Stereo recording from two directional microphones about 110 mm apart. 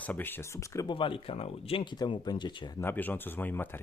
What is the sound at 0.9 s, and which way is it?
Speech, 50° left (ahead or behind).